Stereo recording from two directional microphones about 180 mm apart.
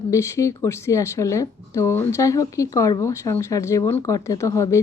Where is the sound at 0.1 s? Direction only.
15° left (ahead or behind).